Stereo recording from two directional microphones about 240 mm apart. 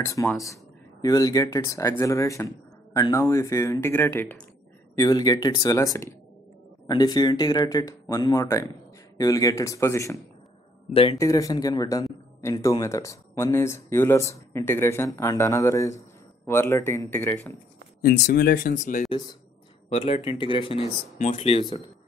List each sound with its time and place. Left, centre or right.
0.0 s speech: centre
10.9 s speech: left
18.0 s speech: left
19.0 s speech: centre